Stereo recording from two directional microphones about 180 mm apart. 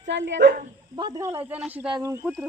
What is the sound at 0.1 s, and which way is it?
Speech, 80° right.